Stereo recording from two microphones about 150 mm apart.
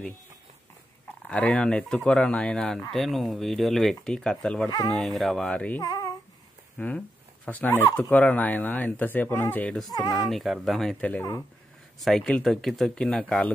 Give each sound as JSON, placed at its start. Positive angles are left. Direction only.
{"t": 1.2, "sound": "speech", "side_deg": 10}
{"t": 5.8, "sound": "a sound", "side_deg": 25}
{"t": 6.8, "sound": "speech", "side_deg": 15}
{"t": 9.6, "sound": "speech", "side_deg": 5}